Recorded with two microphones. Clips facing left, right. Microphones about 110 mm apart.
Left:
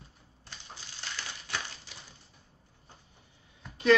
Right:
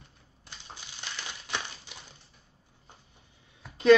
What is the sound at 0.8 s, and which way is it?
Crumpling, 20° right (ahead or behind).